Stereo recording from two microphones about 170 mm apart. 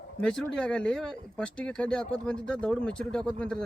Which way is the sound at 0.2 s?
5° left (ahead or behind).